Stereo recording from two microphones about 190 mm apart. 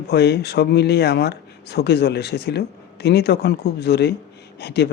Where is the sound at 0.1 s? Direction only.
60° left (ahead or behind).